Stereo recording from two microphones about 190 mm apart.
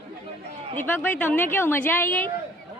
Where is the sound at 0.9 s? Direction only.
10° left (ahead or behind).